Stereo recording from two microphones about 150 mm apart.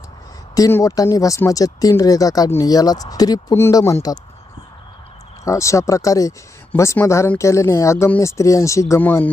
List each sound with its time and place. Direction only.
0.5 s speech: 20° left (ahead or behind)
5.5 s speech: 20° left (ahead or behind)